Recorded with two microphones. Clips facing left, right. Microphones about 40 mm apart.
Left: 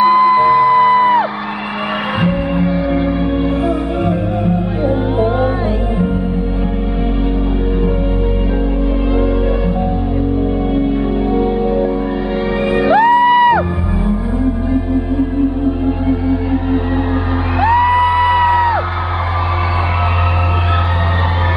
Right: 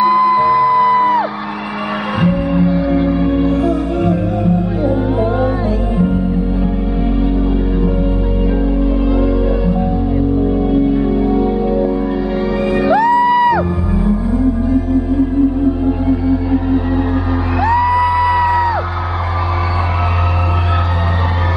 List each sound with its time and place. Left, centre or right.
0.0 s music: left
9.1 s music: left